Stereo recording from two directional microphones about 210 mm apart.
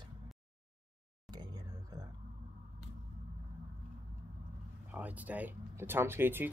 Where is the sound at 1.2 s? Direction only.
20° right (ahead or behind).